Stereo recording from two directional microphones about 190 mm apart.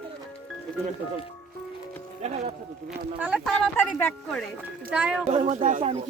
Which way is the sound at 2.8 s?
5° right (ahead or behind).